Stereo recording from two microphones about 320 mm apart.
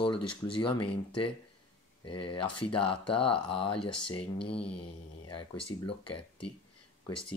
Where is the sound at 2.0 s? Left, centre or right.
Centre.